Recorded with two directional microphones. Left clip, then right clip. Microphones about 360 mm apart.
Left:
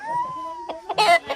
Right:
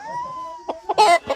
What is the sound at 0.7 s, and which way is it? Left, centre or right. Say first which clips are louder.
Chicken: right 3 dB; right.